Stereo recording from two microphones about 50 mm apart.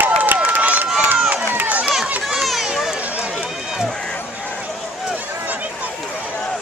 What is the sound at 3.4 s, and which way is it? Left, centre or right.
Run, centre.